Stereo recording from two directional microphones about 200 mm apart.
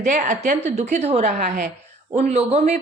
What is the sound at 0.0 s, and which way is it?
A woman's voice, 40° right (ahead or behind).